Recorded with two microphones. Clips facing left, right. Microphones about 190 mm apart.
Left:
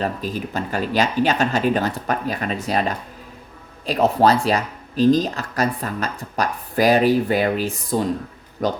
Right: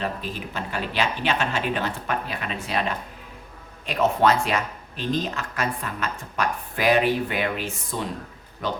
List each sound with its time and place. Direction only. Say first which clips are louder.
0.0 s speech: left 5 dB; 40° left (ahead or behind)